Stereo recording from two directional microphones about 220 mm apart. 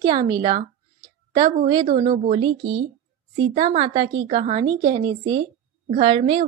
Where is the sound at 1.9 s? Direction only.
30° right (ahead or behind).